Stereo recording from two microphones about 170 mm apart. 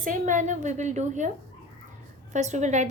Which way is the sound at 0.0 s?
50° right (ahead or behind).